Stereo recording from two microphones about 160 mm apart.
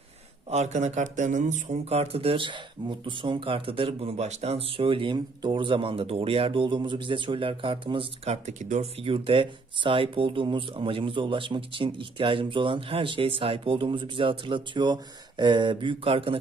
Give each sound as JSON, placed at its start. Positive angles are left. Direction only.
{"t": 0.5, "sound": "speech", "side_deg": -45}